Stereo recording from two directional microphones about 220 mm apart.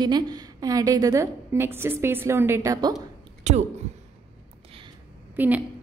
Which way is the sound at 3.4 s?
30° right (ahead or behind).